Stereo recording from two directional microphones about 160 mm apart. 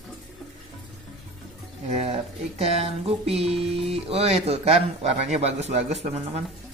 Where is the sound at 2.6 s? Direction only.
40° right (ahead or behind).